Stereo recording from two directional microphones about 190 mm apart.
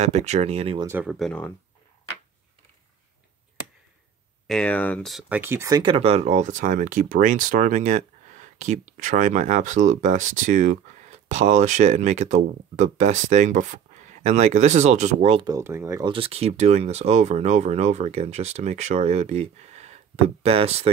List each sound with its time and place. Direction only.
0.0 s speech: 35° right (ahead or behind)
0.8 s speech: 10° right (ahead or behind)
1.1 s speech: 5° left (ahead or behind)
4.5 s speech: 5° left (ahead or behind)
5.4 s speech: 15° right (ahead or behind)
5.8 s speech: 30° right (ahead or behind)
15.4 s speech: 15° right (ahead or behind)
16.1 s speech: 30° right (ahead or behind)